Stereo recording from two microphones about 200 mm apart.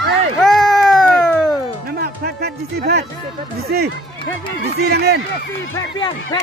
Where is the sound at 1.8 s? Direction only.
50° right (ahead or behind).